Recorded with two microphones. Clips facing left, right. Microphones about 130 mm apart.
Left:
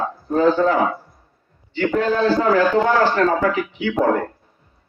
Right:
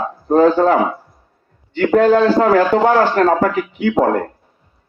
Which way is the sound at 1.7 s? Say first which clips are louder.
Right 7 dB; 60° right (ahead or behind).